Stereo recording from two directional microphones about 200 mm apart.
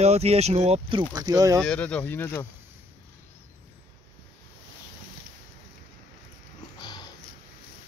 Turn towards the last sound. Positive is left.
turn(degrees=20)  # may be behind; listen again after turning